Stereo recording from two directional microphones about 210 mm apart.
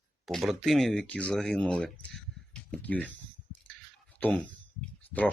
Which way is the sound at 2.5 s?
5° left (ahead or behind).